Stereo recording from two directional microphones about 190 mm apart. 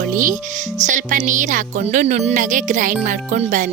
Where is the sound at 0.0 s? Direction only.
45° right (ahead or behind).